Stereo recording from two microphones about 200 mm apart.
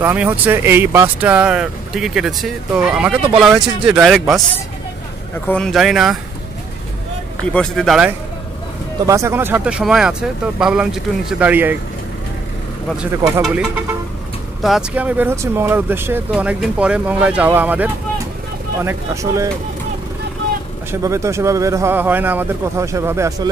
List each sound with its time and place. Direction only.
0.0 s speech: 10° right (ahead or behind)
5.5 s speech: centre (ahead or behind)
7.5 s speech: centre (ahead or behind)
9.0 s speech: 15° right (ahead or behind)
12.9 s speech: 5° right (ahead or behind)
20.9 s speech: 15° right (ahead or behind)